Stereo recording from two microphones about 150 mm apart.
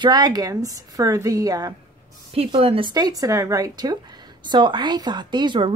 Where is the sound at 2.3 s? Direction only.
40° right (ahead or behind).